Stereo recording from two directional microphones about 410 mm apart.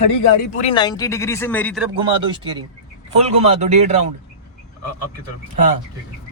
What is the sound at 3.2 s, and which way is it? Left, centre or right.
Speech, centre.